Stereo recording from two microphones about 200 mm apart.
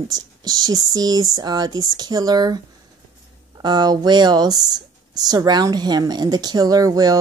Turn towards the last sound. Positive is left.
turn(degrees=-20)  # may be behind; listen again after turning